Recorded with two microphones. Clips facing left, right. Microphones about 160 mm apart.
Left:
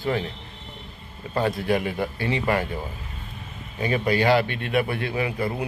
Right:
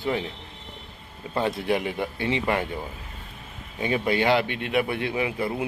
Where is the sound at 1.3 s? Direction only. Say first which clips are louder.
Left 2 dB; 20° right (ahead or behind).